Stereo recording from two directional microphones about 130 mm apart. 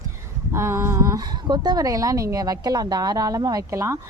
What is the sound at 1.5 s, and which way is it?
Speech, 30° right (ahead or behind).